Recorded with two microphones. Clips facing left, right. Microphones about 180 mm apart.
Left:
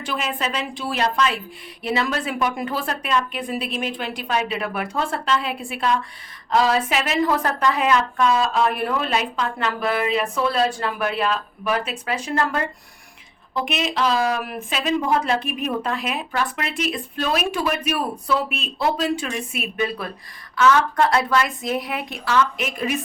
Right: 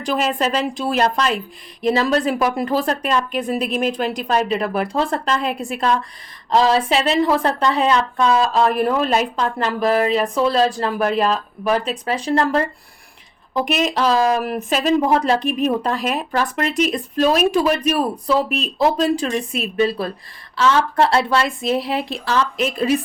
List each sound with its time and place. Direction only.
0.0 s a woman's voice: 40° right (ahead or behind)
6.5 s a woman's voice: 30° right (ahead or behind)